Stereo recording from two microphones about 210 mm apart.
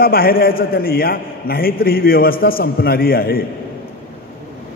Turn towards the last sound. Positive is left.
turn(degrees=45)  # may be behind; listen again after turning